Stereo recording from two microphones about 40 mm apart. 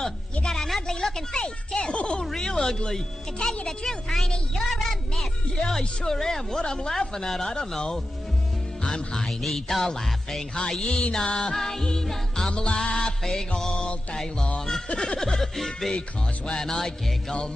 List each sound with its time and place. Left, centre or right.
0.5 s a sound: centre
0.9 s speech: centre
2.3 s music: centre
4.6 s speech: centre
5.7 s music: centre
6.6 s speech: centre
6.9 s music: centre
8.8 s music: centre
9.4 s music: centre
12.4 s speech: left
13.2 s music: centre